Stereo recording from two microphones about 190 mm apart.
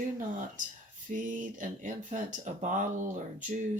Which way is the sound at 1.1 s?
45° right (ahead or behind).